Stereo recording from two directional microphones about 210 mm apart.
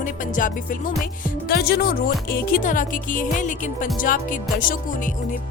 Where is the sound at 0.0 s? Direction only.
40° left (ahead or behind).